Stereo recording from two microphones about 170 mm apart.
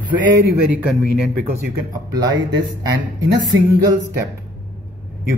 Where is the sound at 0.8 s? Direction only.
Centre (ahead or behind).